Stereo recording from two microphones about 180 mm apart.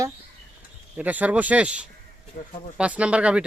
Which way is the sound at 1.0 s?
10° right (ahead or behind).